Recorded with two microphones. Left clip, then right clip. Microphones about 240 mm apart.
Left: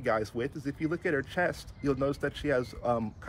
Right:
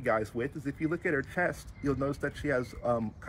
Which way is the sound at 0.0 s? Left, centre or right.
Centre.